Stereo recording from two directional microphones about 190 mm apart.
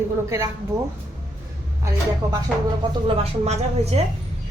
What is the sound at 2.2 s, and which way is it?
Speech, 15° right (ahead or behind).